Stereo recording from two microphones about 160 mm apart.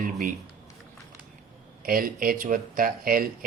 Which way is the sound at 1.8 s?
60° right (ahead or behind).